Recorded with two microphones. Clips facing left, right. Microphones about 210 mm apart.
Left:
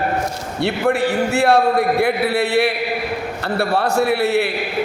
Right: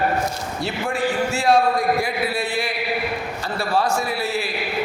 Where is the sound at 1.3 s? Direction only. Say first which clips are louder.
Left 3 dB; 65° left (ahead or behind).